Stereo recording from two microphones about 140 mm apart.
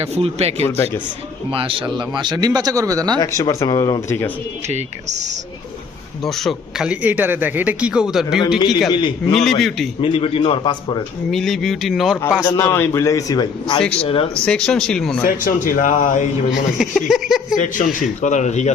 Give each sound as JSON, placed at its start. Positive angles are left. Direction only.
{"t": 0.0, "sound": "a man's voice", "side_deg": -45}
{"t": 3.2, "sound": "a man's voice", "side_deg": 25}
{"t": 4.7, "sound": "speech", "side_deg": -55}
{"t": 6.2, "sound": "a man's voice", "side_deg": 0}
{"t": 8.5, "sound": "a man's voice", "side_deg": 30}
{"t": 9.3, "sound": "speech", "side_deg": 5}
{"t": 10.0, "sound": "a man's voice", "side_deg": 40}
{"t": 11.3, "sound": "speech", "side_deg": 0}
{"t": 12.4, "sound": "a man's voice", "side_deg": 25}
{"t": 14.0, "sound": "a man's voice", "side_deg": 40}
{"t": 14.4, "sound": "speech", "side_deg": 5}
{"t": 15.2, "sound": "speech", "side_deg": 85}
{"t": 16.5, "sound": "speech", "side_deg": -5}
{"t": 17.5, "sound": "a man's voice", "side_deg": 65}